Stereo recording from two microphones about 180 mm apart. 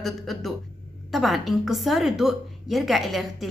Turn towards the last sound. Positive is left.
turn(degrees=0)  # may be behind; listen again after turning